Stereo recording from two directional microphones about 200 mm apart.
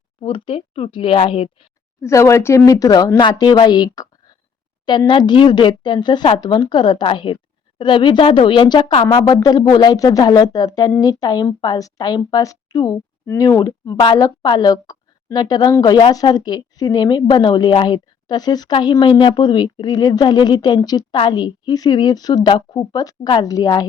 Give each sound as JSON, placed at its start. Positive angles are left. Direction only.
{"t": 0.2, "sound": "speech", "side_deg": 25}
{"t": 2.0, "sound": "speech", "side_deg": 15}